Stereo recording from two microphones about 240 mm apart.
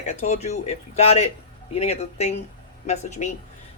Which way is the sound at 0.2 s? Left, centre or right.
Left.